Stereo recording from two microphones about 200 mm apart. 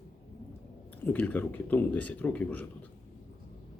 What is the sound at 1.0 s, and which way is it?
Speech, 10° left (ahead or behind).